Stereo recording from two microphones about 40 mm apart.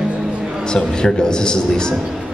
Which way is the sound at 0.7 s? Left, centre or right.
Centre.